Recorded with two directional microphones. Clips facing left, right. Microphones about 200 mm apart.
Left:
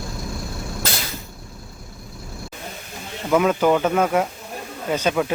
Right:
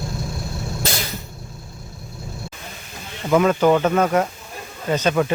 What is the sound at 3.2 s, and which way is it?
Speech, 5° left (ahead or behind).